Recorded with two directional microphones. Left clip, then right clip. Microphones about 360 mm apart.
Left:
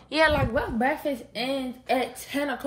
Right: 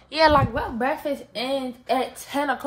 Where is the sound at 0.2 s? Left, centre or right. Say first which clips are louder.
Right 4 dB; centre.